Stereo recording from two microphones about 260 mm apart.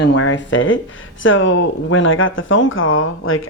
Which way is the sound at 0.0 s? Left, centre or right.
Left.